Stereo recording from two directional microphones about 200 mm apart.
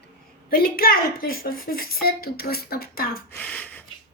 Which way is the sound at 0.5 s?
50° left (ahead or behind).